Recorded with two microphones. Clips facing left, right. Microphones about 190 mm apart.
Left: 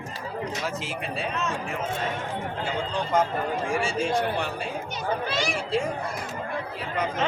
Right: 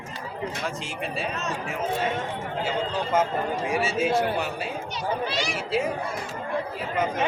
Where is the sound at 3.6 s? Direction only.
5° right (ahead or behind).